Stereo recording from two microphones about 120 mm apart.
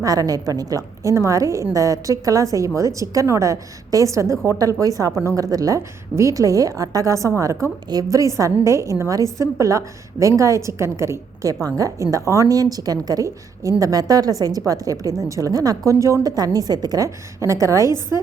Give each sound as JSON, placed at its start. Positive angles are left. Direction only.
{"t": 0.0, "sound": "a woman's voice", "side_deg": -30}